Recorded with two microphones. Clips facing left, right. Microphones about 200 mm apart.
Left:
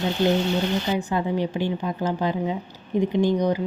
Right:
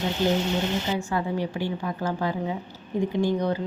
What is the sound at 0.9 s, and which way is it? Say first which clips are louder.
A woman's voice: left 3 dB; 20° left (ahead or behind).